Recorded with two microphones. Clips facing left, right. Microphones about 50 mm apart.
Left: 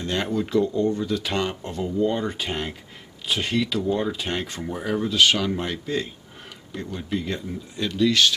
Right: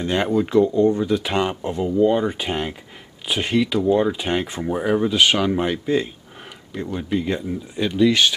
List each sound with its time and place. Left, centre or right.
0.0 s speech: centre